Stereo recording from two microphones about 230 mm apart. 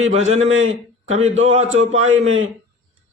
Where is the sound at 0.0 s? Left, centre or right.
Right.